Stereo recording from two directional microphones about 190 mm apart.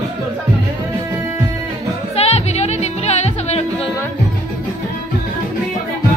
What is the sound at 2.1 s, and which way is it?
Music, 35° left (ahead or behind).